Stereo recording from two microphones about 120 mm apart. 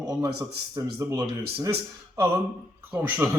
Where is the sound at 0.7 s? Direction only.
30° right (ahead or behind).